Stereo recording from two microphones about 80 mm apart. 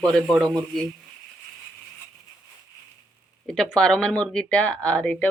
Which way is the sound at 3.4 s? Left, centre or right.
Centre.